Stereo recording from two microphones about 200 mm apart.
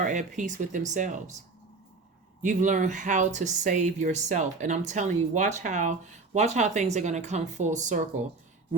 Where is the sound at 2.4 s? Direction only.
40° right (ahead or behind).